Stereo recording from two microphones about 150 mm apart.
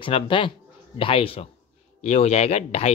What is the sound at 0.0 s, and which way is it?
Speech, 35° left (ahead or behind).